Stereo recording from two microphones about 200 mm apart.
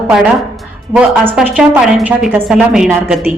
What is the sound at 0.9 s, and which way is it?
A woman's voice, 10° right (ahead or behind).